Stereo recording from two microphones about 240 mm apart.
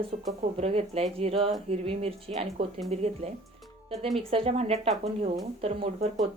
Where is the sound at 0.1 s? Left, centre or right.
Right.